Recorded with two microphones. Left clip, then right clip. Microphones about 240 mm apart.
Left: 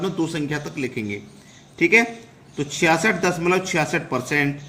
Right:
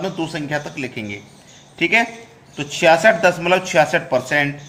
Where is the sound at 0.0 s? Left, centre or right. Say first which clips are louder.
Even; left.